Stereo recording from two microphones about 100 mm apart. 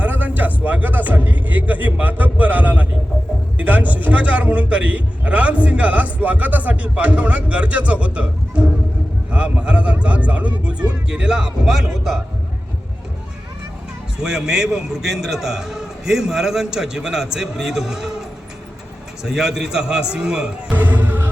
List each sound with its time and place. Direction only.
0.0 s a man's voice: 15° right (ahead or behind)
14.2 s a man's voice: 5° right (ahead or behind)
20.7 s music: 15° right (ahead or behind)